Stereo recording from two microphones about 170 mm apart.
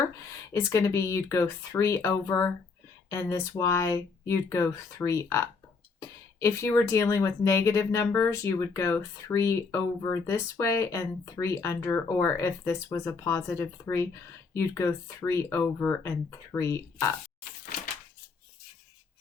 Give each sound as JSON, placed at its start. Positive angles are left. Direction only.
{"t": 0.5, "sound": "speech", "side_deg": 15}